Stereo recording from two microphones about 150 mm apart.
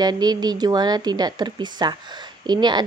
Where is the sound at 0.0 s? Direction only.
30° right (ahead or behind).